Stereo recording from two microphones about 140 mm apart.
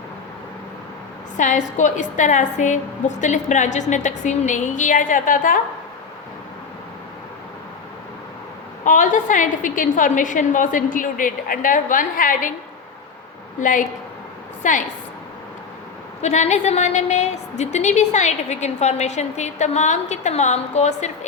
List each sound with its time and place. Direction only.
1.4 s a woman's voice: 65° left (ahead or behind)
8.8 s a woman's voice: 65° left (ahead or behind)
13.6 s a woman's voice: 70° left (ahead or behind)
16.2 s a woman's voice: 55° left (ahead or behind)